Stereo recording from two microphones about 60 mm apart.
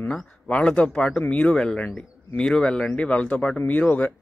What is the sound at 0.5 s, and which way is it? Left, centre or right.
Speech, centre.